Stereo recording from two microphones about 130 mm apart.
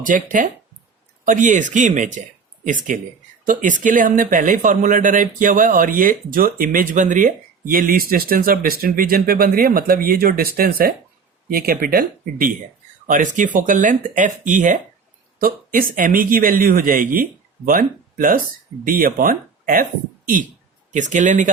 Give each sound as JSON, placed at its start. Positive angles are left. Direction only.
{"t": 0.0, "sound": "speech", "side_deg": -90}
{"t": 1.2, "sound": "speech", "side_deg": -80}
{"t": 2.6, "sound": "speech", "side_deg": -85}
{"t": 11.4, "sound": "speech", "side_deg": -90}
{"t": 15.4, "sound": "speech", "side_deg": -90}
{"t": 20.9, "sound": "speech", "side_deg": -70}